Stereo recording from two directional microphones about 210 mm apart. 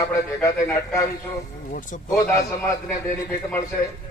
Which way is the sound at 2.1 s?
15° left (ahead or behind).